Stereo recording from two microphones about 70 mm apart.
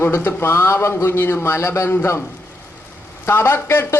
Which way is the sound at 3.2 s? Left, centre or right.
Left.